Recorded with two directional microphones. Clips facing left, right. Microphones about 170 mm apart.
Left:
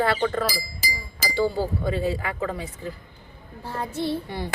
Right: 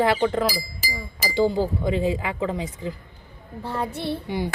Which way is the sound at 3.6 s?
65° right (ahead or behind).